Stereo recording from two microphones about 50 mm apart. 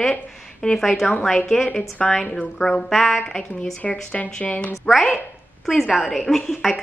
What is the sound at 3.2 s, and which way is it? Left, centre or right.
A woman's voice, centre.